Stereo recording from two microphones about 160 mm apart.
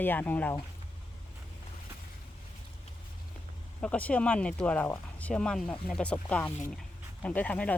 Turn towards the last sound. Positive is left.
turn(degrees=10)  # may be behind; listen again after turning